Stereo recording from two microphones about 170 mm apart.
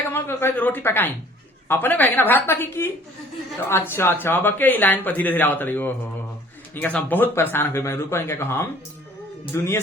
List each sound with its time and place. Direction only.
0.1 s speech: 15° left (ahead or behind)